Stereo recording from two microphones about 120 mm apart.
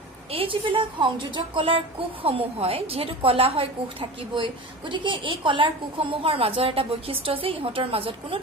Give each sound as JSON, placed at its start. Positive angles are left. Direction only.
{"t": 0.3, "sound": "a woman's voice", "side_deg": -50}